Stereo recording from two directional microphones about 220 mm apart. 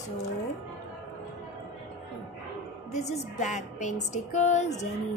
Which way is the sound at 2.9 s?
30° left (ahead or behind).